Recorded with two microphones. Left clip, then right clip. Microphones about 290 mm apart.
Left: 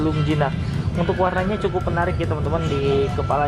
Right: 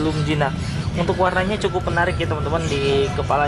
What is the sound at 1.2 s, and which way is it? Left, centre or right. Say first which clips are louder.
Speech: right 2 dB; centre.